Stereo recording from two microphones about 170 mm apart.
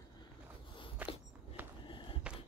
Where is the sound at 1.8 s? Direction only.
30° left (ahead or behind).